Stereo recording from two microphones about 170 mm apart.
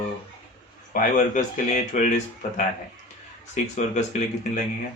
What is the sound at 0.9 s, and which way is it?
Speech, 50° left (ahead or behind).